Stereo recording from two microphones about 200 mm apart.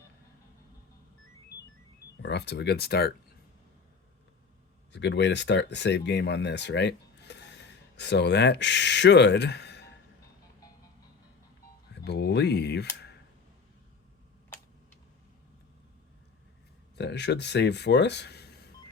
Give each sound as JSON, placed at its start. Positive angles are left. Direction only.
{"t": 2.2, "sound": "speech", "side_deg": 60}
{"t": 4.9, "sound": "speech", "side_deg": 60}
{"t": 11.9, "sound": "speech", "side_deg": 55}
{"t": 16.9, "sound": "speech", "side_deg": 60}